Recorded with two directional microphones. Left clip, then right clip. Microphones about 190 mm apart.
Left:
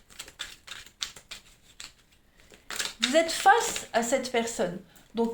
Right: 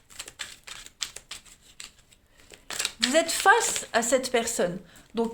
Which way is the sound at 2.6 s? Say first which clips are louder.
Right 2 dB; 40° right (ahead or behind).